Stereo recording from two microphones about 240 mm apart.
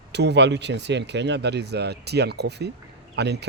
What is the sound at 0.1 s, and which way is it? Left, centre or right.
Speech, right.